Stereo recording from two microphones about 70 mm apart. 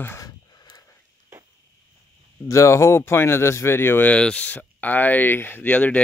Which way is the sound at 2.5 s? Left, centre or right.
Left.